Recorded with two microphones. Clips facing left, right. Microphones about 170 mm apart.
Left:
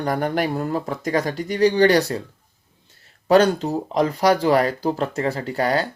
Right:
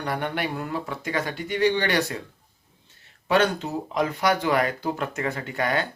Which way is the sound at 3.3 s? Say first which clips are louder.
Left 6 dB; 35° left (ahead or behind).